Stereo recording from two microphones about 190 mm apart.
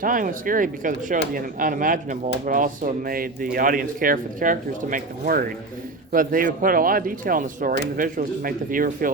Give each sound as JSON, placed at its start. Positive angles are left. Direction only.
{"t": 0.0, "sound": "speech", "side_deg": -45}